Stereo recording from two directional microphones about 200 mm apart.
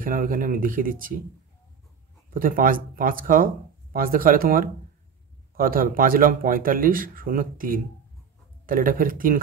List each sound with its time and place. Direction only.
0.0 s speech: 45° right (ahead or behind)
2.3 s speech: 45° right (ahead or behind)